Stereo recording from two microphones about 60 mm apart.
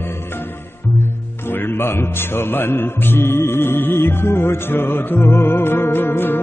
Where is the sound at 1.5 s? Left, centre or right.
Left.